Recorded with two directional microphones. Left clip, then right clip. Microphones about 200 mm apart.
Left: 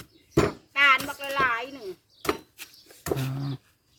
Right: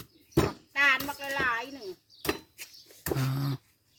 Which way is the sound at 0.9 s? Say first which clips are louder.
Left 4 dB; 20° right (ahead or behind).